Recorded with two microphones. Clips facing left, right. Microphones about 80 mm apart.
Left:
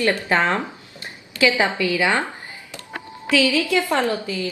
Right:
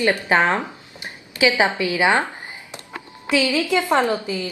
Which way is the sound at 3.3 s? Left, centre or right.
Right.